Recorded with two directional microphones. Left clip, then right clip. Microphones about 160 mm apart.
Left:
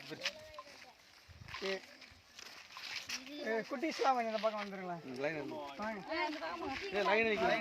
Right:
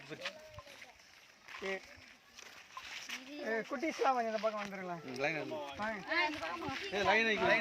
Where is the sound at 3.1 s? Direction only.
35° left (ahead or behind).